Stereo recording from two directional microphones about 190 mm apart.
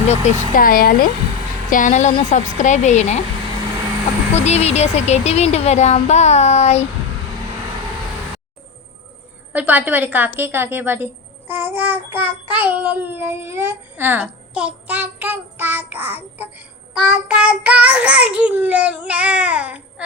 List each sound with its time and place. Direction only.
0.1 s speech: 40° left (ahead or behind)
4.4 s speech: 35° left (ahead or behind)
9.5 s a woman's voice: 10° right (ahead or behind)